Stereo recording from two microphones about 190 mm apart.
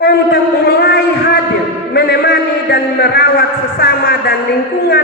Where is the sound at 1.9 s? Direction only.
55° left (ahead or behind).